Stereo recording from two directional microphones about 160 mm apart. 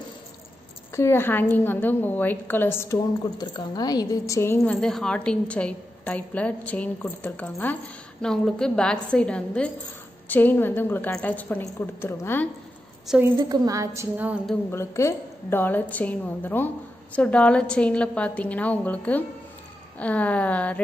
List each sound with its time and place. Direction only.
0.9 s a woman's voice: 15° left (ahead or behind)
4.7 s a woman's voice: 5° left (ahead or behind)
13.2 s a woman's voice: 20° right (ahead or behind)
14.1 s speech: 10° right (ahead or behind)
14.7 s a woman's voice: 15° left (ahead or behind)